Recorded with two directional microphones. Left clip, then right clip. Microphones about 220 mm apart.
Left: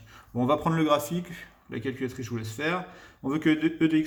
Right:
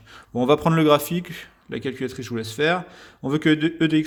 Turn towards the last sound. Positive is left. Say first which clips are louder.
# right 4 dB
turn(degrees=-40)  # may be behind; listen again after turning